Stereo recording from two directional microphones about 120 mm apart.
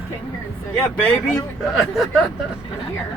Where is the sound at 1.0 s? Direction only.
5° left (ahead or behind).